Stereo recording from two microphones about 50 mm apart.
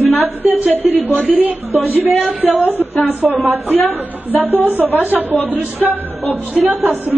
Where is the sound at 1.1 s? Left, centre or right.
Right.